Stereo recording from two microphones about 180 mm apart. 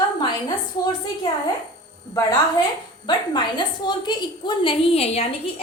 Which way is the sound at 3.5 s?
25° left (ahead or behind).